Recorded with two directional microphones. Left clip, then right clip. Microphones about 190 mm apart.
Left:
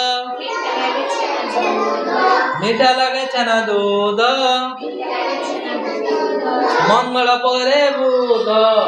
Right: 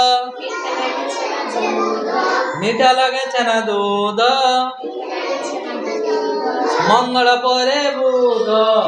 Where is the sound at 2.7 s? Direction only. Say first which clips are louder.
Right 2 dB; 40° right (ahead or behind).